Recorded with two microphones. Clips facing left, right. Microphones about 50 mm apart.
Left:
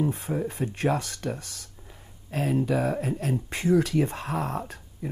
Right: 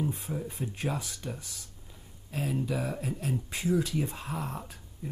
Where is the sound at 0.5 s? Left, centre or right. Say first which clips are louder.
Left 9 dB; left.